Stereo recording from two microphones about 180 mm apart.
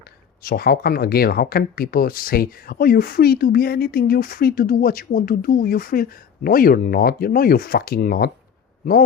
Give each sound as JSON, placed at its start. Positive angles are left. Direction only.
{"t": 0.4, "sound": "speech", "side_deg": 60}